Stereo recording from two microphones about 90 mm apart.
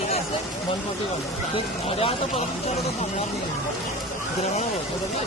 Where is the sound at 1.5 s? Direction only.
90° left.